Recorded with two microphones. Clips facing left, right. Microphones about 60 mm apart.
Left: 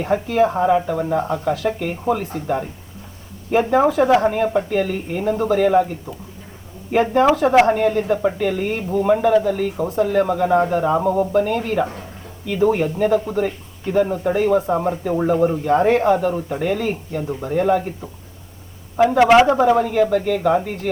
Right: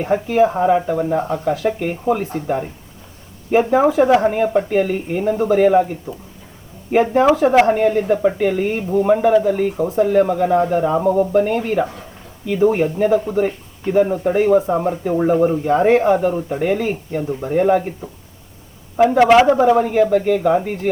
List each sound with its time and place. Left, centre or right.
0.0 s speech: centre
1.5 s speech: right
3.5 s speech: centre
6.9 s speech: centre
10.2 s speech: centre
11.3 s speech: right
15.8 s speech: right
16.1 s speech: centre
18.9 s speech: centre